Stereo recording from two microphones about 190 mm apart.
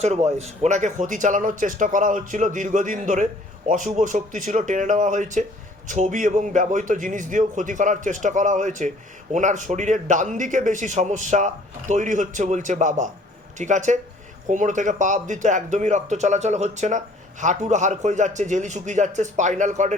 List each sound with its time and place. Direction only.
0.0 s a man's voice: 35° right (ahead or behind)